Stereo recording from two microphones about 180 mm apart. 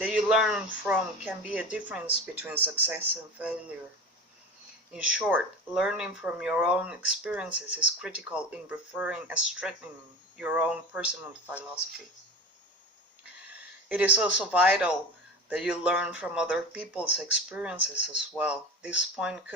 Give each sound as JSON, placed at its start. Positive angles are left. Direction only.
{"t": 0.0, "sound": "speech", "side_deg": -5}
{"t": 4.9, "sound": "speech", "side_deg": -5}
{"t": 13.5, "sound": "a sound", "side_deg": -10}
{"t": 14.2, "sound": "speech", "side_deg": -5}